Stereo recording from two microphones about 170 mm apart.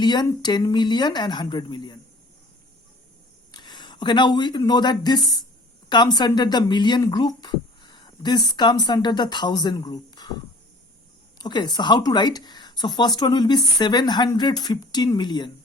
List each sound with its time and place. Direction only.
0.0 s speech: 25° left (ahead or behind)
3.5 s speech: 25° left (ahead or behind)